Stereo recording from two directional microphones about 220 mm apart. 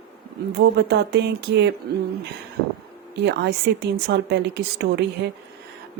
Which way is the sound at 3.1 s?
50° right (ahead or behind).